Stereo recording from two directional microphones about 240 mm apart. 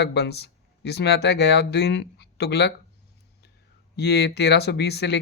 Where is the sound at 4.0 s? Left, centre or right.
Left.